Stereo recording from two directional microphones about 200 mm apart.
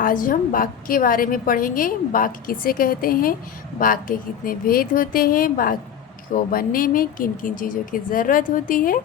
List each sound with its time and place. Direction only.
0.0 s a woman's voice: 45° left (ahead or behind)